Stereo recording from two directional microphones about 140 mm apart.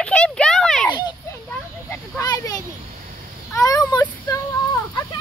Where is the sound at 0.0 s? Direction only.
5° left (ahead or behind).